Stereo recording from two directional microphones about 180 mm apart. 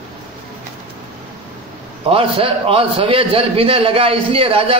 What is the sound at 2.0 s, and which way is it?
A man's voice, 30° right (ahead or behind).